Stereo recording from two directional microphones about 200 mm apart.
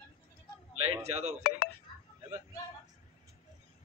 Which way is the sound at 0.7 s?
30° right (ahead or behind).